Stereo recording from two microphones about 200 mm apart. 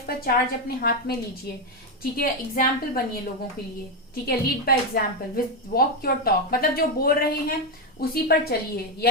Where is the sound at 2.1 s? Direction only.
50° left (ahead or behind).